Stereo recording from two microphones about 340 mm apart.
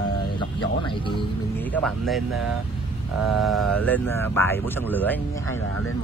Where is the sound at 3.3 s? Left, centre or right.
Centre.